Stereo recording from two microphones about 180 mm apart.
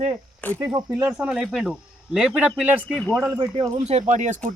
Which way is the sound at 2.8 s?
5° left (ahead or behind).